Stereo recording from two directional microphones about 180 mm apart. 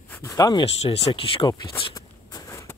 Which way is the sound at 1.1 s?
30° left (ahead or behind).